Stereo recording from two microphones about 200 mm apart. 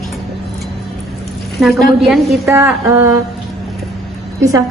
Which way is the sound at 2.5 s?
15° right (ahead or behind).